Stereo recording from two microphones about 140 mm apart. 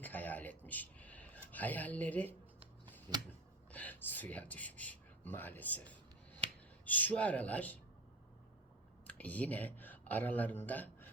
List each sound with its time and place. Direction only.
0.0 s a sound: 10° left (ahead or behind)
6.8 s speech: 10° left (ahead or behind)
9.0 s speech: 10° left (ahead or behind)